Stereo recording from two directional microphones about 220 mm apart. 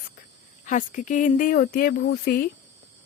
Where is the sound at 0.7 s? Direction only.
35° left (ahead or behind).